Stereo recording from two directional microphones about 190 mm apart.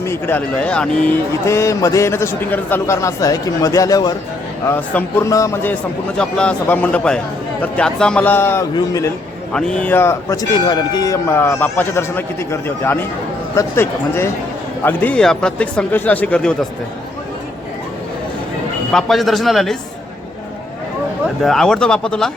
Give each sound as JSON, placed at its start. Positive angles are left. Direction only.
{"t": 0.0, "sound": "speech", "side_deg": 10}
{"t": 9.5, "sound": "speech", "side_deg": 5}
{"t": 18.9, "sound": "speech", "side_deg": 0}
{"t": 21.4, "sound": "speech", "side_deg": 0}